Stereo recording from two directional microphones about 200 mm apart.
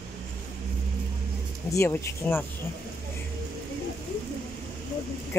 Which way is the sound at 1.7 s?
15° left (ahead or behind).